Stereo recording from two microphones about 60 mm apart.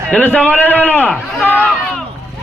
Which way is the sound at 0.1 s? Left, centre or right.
Left.